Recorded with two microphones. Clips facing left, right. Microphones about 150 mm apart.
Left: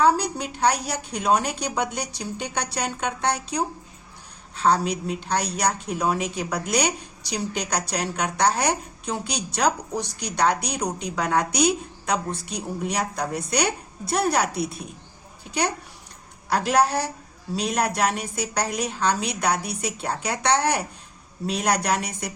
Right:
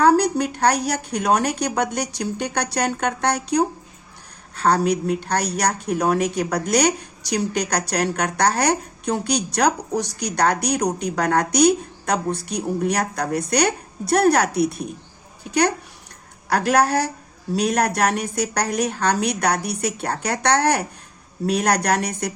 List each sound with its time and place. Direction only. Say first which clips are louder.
0.0 s a woman's voice: right 5 dB; 65° right (ahead or behind)
11.1 s a woman's voice: right 1 dB; 55° right (ahead or behind)
16.5 s a woman's voice: right 3 dB; 60° right (ahead or behind)